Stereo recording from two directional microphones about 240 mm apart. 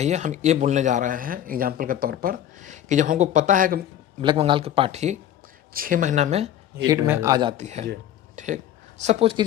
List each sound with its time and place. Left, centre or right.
0.0 s speech: right
4.2 s speech: centre
6.8 s speech: centre